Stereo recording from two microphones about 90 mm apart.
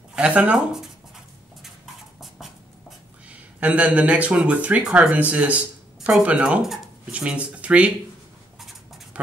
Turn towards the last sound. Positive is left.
turn(degrees=-15)  # may be behind; listen again after turning